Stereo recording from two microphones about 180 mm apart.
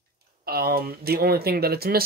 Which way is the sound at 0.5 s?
55° right (ahead or behind).